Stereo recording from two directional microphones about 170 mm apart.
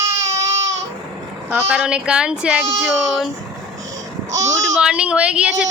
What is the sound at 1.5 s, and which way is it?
A child's voice, 5° right (ahead or behind).